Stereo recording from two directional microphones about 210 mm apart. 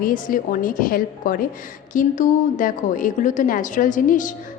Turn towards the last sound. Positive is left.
turn(degrees=40)  # may be behind; listen again after turning